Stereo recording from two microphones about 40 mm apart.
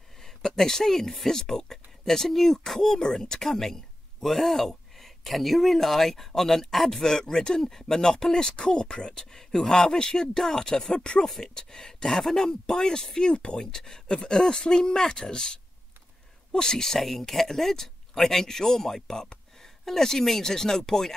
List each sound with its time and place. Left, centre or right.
0.2 s speech: centre
7.1 s speech: centre
17.0 s speech: centre